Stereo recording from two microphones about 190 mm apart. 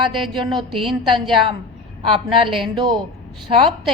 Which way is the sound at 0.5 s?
Centre (ahead or behind).